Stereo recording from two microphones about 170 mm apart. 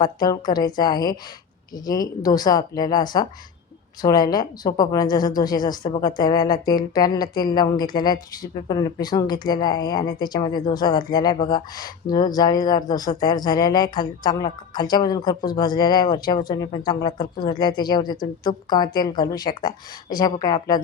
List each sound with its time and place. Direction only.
0.0 s speech: 25° left (ahead or behind)